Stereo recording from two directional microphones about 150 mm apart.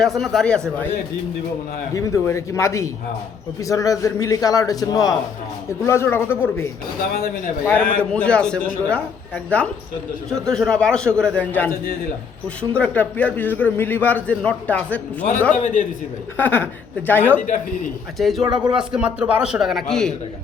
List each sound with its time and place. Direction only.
0.0 s a man's voice: centre (ahead or behind)
2.0 s a man's voice: 20° left (ahead or behind)
7.1 s a man's voice: 80° left
7.6 s a man's voice: 10° left (ahead or behind)
12.7 s a man's voice: 10° left (ahead or behind)
15.6 s a man's voice: 60° left (ahead or behind)
16.4 s a man's voice: 10° left (ahead or behind)
18.2 s a man's voice: centre (ahead or behind)
18.4 s speech: 30° right (ahead or behind)
18.7 s a man's voice: 5° right (ahead or behind)